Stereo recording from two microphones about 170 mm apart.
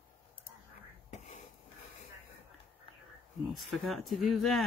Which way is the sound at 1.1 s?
45° left (ahead or behind).